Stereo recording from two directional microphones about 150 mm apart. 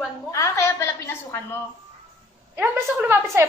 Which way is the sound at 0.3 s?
20° left (ahead or behind).